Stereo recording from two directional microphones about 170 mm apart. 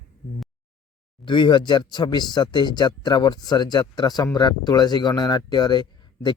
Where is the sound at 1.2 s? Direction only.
25° left (ahead or behind).